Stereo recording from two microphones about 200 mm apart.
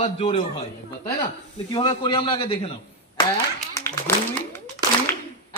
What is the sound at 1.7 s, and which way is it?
Speech, 25° left (ahead or behind).